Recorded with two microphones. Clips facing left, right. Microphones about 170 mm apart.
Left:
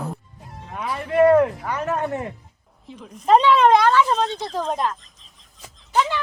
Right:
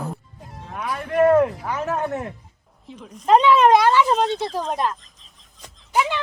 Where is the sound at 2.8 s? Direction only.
Centre (ahead or behind).